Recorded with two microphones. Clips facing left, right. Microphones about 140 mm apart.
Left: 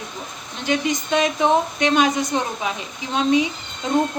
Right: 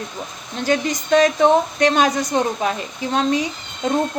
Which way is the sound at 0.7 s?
40° right (ahead or behind).